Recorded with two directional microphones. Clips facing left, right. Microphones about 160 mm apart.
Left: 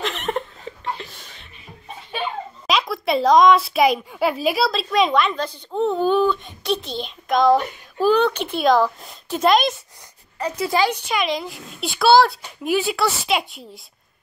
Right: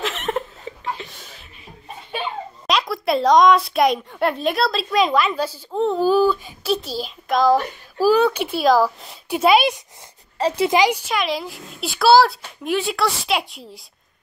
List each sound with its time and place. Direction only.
0.0 s chuckle: centre (ahead or behind)
2.6 s a woman's voice: centre (ahead or behind)
10.4 s a child's voice: 30° right (ahead or behind)
10.7 s speech: 15° right (ahead or behind)
11.1 s a woman's voice: centre (ahead or behind)